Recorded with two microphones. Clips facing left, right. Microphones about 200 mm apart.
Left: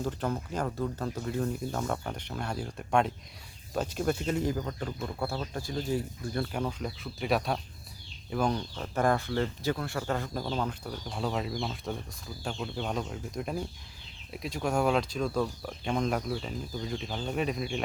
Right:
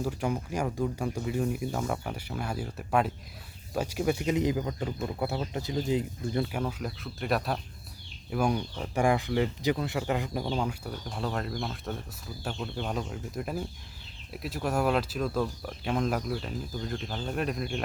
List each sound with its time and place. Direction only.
0.0 s speech: 10° right (ahead or behind)
6.5 s speech: 5° right (ahead or behind)